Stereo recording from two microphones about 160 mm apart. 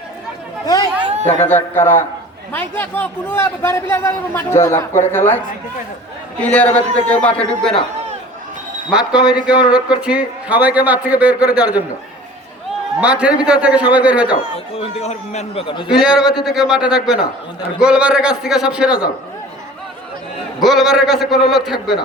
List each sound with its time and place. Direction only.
0.6 s chatter: 25° left (ahead or behind)
1.5 s a man's voice: 10° left (ahead or behind)
6.4 s a man's voice: 10° left (ahead or behind)
8.9 s a man's voice: 5° right (ahead or behind)
13.0 s a man's voice: 5° right (ahead or behind)
14.8 s speech: 40° left (ahead or behind)
15.9 s a man's voice: 5° right (ahead or behind)
20.6 s a man's voice: centre (ahead or behind)